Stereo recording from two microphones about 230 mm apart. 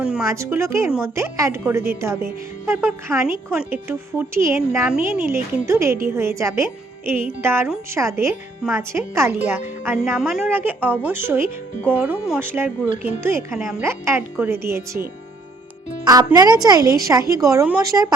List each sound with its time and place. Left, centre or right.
0.0 s speech: centre
16.0 s speech: centre